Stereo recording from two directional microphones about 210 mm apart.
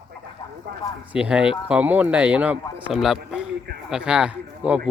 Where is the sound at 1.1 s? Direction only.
5° right (ahead or behind).